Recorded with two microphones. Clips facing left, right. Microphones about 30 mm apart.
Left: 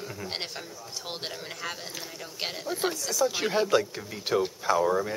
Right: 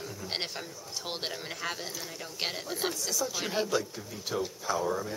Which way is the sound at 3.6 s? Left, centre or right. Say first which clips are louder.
Left 6 dB; left.